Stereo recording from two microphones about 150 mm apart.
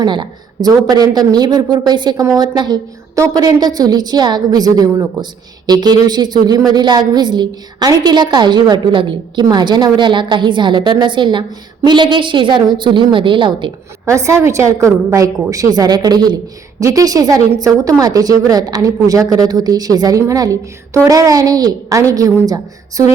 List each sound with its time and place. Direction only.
0.0 s a woman's voice: 30° right (ahead or behind)
14.0 s speech: 20° right (ahead or behind)